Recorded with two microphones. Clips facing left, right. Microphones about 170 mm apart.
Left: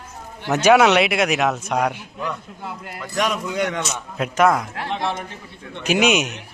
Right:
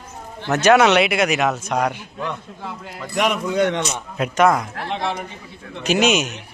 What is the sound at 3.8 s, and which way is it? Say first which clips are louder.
Speech: right 2 dB; centre (ahead or behind).